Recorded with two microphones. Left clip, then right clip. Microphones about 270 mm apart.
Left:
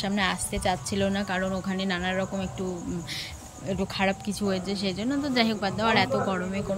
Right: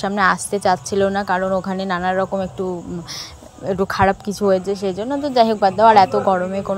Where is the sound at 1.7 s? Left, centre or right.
Centre.